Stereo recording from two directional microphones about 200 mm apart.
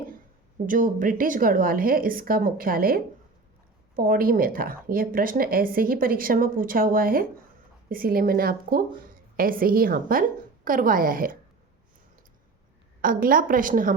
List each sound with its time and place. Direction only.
0.7 s speech: 40° right (ahead or behind)
13.0 s speech: 45° right (ahead or behind)